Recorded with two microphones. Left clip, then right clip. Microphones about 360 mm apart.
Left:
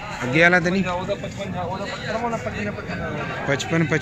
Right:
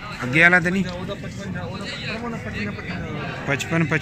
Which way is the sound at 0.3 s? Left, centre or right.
Centre.